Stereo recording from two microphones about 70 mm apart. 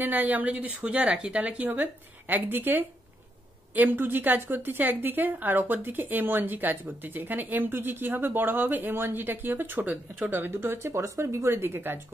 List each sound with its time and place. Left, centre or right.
0.0 s a woman's voice: right